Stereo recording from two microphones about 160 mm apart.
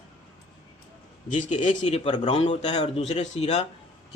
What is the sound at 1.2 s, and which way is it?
Speech, 50° left (ahead or behind).